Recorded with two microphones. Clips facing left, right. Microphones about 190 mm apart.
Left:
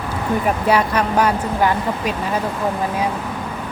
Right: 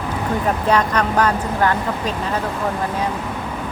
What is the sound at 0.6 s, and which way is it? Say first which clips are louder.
Speech: even; 10° left (ahead or behind).